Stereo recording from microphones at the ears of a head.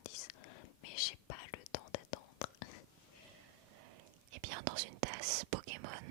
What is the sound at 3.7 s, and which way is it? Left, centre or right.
Whispering, right.